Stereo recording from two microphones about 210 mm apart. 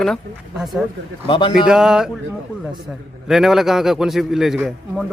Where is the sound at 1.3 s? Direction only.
25° left (ahead or behind).